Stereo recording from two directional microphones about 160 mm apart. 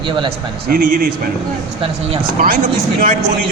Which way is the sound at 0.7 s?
65° right (ahead or behind).